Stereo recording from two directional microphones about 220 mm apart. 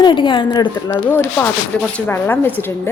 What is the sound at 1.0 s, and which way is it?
Speech, 10° left (ahead or behind).